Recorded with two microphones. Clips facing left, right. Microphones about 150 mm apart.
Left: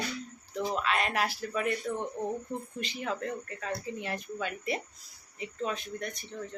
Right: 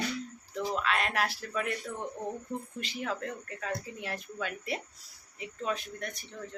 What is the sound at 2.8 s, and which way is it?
Speech, centre (ahead or behind).